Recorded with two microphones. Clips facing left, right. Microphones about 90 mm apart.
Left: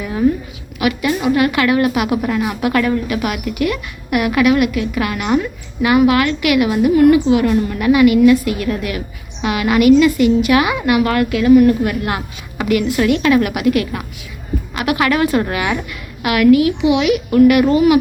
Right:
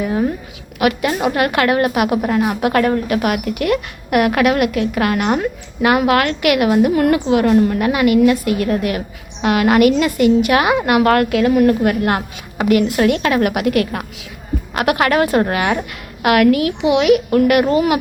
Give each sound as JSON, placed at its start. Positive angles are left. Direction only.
{"t": 0.0, "sound": "a woman's voice", "side_deg": -40}
{"t": 0.8, "sound": "a woman's voice", "side_deg": -50}
{"t": 9.4, "sound": "a woman's voice", "side_deg": -50}
{"t": 16.2, "sound": "a woman's voice", "side_deg": -55}